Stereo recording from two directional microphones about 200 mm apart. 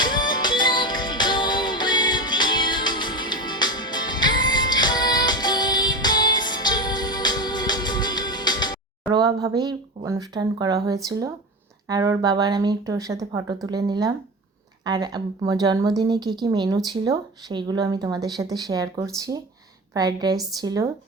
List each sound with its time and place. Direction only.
0.0 s music: 20° left (ahead or behind)
9.1 s a woman's voice: 20° right (ahead or behind)